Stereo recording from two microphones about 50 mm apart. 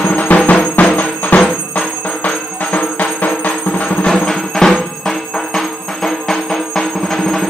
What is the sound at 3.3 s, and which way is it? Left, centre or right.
Drum, left.